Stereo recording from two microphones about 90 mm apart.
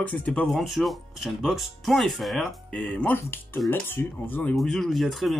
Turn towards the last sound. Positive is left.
turn(degrees=0)  # may be behind; listen again after turning